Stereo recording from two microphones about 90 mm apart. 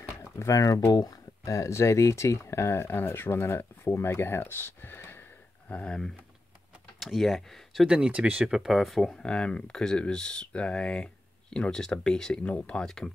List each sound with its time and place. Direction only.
0.4 s speech: 40° left (ahead or behind)
5.7 s speech: 10° left (ahead or behind)
7.8 s speech: 10° right (ahead or behind)
8.5 s speech: 5° right (ahead or behind)